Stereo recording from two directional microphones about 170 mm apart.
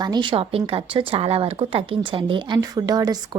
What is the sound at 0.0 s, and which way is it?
A woman's voice, 25° right (ahead or behind).